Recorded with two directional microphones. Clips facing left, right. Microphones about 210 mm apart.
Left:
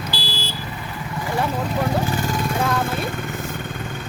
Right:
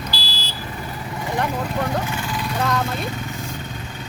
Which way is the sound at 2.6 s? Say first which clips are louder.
Right 1 dB; 5° left (ahead or behind).